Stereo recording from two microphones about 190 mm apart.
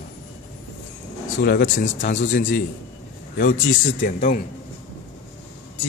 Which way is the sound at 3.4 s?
85° left.